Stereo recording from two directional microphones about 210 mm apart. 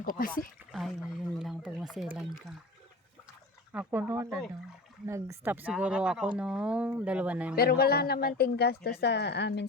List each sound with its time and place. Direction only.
0.0 s speech: 45° left (ahead or behind)
0.7 s speech: centre (ahead or behind)
3.7 s speech: 10° right (ahead or behind)
7.5 s speech: 45° left (ahead or behind)